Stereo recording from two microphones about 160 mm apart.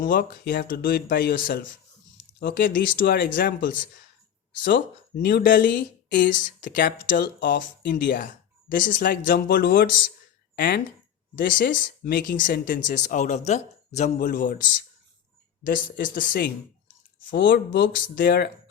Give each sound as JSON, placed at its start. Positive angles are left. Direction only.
{"t": 0.0, "sound": "speech", "side_deg": 60}
{"t": 17.3, "sound": "speech", "side_deg": 75}